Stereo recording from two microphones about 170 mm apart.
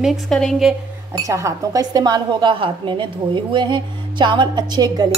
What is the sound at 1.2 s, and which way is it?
Speech, 20° right (ahead or behind).